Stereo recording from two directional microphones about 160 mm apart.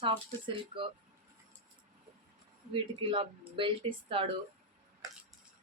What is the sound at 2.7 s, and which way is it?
Speech, 30° right (ahead or behind).